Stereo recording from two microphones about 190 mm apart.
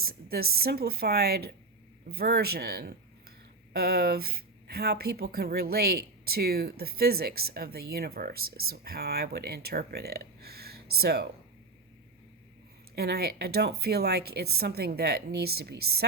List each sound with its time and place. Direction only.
0.0 s speech: 55° right (ahead or behind)
13.0 s speech: 55° right (ahead or behind)